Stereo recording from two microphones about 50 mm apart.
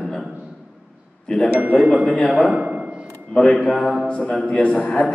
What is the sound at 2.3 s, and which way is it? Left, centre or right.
Speech, centre.